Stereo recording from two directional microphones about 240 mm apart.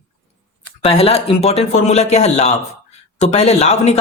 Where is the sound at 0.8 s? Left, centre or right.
Left.